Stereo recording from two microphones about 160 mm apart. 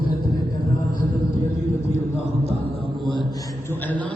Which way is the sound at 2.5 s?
40° right (ahead or behind).